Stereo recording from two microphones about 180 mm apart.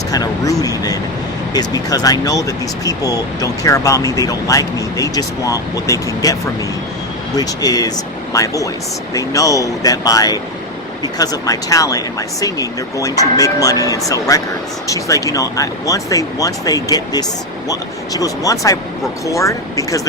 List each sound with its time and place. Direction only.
0.1 s speech: 20° left (ahead or behind)
7.3 s speech: 20° left (ahead or behind)